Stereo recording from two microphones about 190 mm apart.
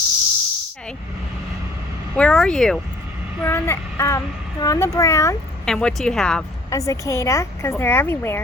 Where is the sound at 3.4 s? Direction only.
15° left (ahead or behind).